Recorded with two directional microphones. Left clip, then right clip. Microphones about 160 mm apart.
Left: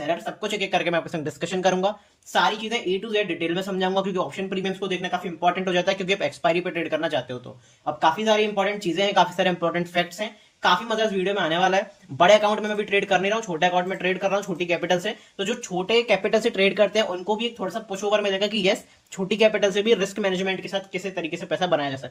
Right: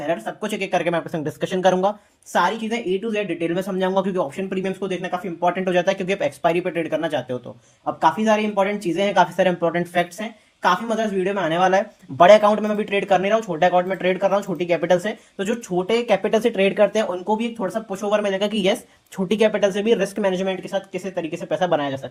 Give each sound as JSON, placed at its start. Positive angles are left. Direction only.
{"t": 0.1, "sound": "speech", "side_deg": -40}
{"t": 2.3, "sound": "speech", "side_deg": -45}
{"t": 7.9, "sound": "speech", "side_deg": -45}
{"t": 10.6, "sound": "speech", "side_deg": -45}
{"t": 17.2, "sound": "speech", "side_deg": -40}